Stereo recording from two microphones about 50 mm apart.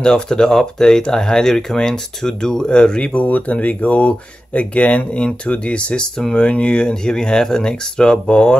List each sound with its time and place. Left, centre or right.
0.0 s speech: centre
3.2 s speech: left